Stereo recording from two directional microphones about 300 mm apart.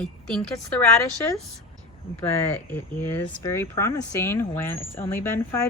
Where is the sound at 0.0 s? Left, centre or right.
Centre.